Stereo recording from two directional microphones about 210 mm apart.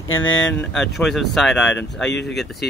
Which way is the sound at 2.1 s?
55° left (ahead or behind).